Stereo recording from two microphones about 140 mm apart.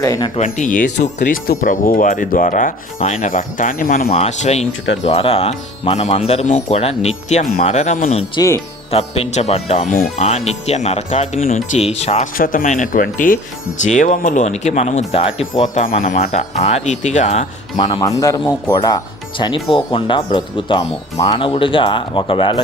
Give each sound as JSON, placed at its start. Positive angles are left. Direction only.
{"t": 0.0, "sound": "speech", "side_deg": 25}
{"t": 0.3, "sound": "speech", "side_deg": 60}
{"t": 4.1, "sound": "speech", "side_deg": 50}
{"t": 8.4, "sound": "speech", "side_deg": 30}
{"t": 8.9, "sound": "speech", "side_deg": 45}
{"t": 12.4, "sound": "speech", "side_deg": 85}
{"t": 13.8, "sound": "speech", "side_deg": 60}
{"t": 15.6, "sound": "speech", "side_deg": 60}
{"t": 17.7, "sound": "speech", "side_deg": 30}